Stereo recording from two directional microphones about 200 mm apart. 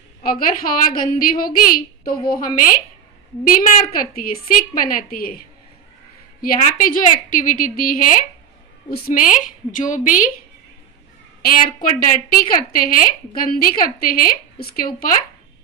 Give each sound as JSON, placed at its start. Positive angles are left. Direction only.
{"t": 0.2, "sound": "a woman's voice", "side_deg": 45}
{"t": 6.6, "sound": "a woman's voice", "side_deg": 40}
{"t": 11.4, "sound": "a woman's voice", "side_deg": 45}